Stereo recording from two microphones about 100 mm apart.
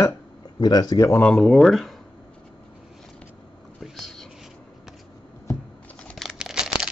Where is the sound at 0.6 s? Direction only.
45° left (ahead or behind).